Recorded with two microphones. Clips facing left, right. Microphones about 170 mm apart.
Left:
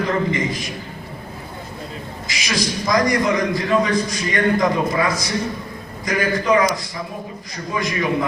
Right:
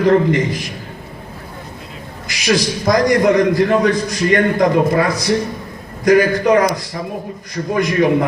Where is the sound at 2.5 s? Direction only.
55° right (ahead or behind).